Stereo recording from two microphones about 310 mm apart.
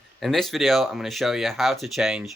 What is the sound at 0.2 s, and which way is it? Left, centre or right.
Speech, centre.